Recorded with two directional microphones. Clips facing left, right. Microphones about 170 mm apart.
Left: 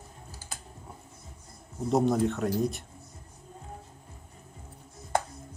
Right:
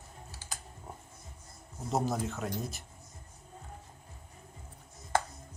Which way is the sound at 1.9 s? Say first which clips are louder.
Left 7 dB; centre (ahead or behind).